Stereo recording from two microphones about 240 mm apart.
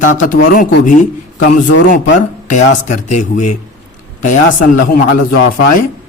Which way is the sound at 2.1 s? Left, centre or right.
Left.